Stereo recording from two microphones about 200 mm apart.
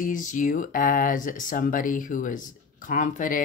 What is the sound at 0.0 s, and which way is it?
Speech, 40° left (ahead or behind).